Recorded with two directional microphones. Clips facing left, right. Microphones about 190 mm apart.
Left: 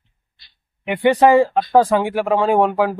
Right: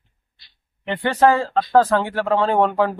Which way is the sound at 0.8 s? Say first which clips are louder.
Left 3 dB; 15° left (ahead or behind).